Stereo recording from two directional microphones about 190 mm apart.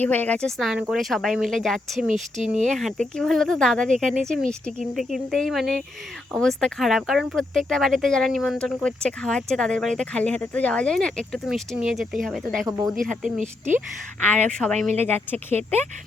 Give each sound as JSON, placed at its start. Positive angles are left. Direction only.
{"t": 0.0, "sound": "speech", "side_deg": 10}
{"t": 13.4, "sound": "speech", "side_deg": -40}
{"t": 14.2, "sound": "speech", "side_deg": 10}